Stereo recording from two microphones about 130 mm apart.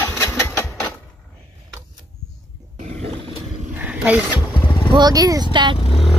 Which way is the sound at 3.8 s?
10° right (ahead or behind).